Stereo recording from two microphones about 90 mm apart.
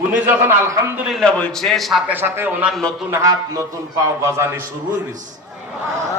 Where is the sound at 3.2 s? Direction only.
40° right (ahead or behind).